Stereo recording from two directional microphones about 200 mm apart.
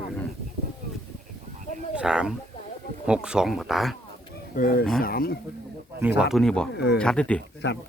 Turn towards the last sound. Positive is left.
turn(degrees=60)  # may be behind; listen again after turning